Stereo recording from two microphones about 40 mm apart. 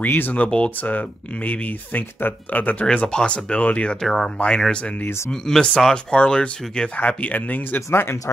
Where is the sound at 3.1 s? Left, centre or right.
Left.